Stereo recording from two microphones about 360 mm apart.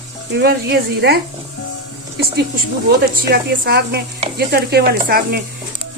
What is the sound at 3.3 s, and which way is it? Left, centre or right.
Stir, right.